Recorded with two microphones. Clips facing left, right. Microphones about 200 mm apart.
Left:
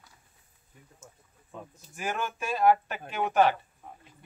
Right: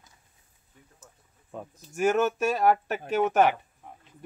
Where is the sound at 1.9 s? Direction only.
45° right (ahead or behind).